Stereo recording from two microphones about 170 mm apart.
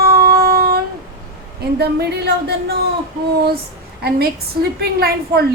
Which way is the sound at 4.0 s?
65° right (ahead or behind).